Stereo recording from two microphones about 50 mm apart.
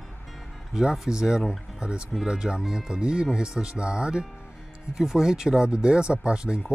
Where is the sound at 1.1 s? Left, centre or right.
Centre.